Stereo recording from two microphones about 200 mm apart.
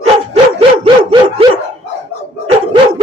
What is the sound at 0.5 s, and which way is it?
Dog, 25° right (ahead or behind).